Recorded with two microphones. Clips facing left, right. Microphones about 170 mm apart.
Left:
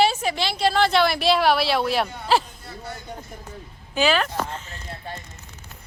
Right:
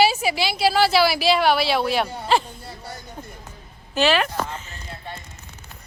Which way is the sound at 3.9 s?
5° right (ahead or behind).